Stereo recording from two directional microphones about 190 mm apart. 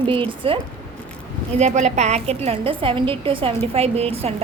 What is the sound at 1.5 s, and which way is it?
A woman's voice, 35° right (ahead or behind).